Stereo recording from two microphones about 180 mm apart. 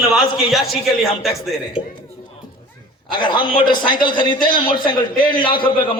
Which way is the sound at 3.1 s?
25° left (ahead or behind).